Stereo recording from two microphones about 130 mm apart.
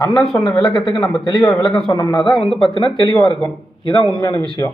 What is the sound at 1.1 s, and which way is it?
Speech, 35° left (ahead or behind).